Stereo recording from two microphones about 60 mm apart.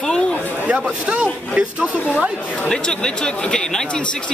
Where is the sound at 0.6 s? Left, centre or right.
Centre.